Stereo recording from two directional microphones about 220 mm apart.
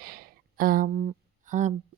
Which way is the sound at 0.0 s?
40° right (ahead or behind).